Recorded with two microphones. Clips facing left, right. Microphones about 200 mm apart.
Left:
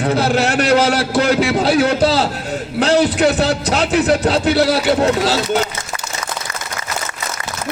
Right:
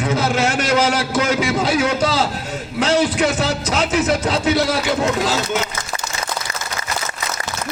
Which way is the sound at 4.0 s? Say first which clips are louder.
Left 5 dB; 35° left (ahead or behind).